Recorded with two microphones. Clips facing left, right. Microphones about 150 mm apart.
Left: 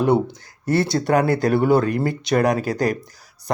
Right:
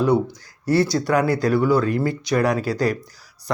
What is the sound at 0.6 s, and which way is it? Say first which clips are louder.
Speech: right 1 dB; 50° left (ahead or behind).